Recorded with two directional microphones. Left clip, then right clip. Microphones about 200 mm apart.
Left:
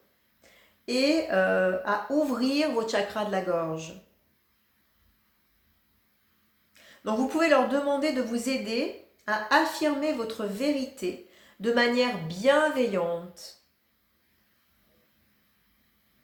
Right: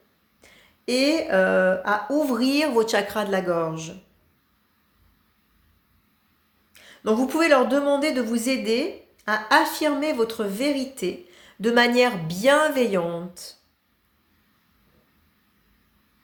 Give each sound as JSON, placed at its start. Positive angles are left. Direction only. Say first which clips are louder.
{"t": 0.4, "sound": "speech", "louder": "right 6 dB", "side_deg": -50}
{"t": 6.7, "sound": "speech", "louder": "right 6 dB", "side_deg": -50}